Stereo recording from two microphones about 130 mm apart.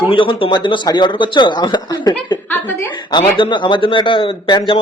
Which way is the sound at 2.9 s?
35° left (ahead or behind).